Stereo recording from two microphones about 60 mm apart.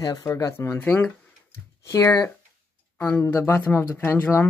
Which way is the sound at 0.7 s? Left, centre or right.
Left.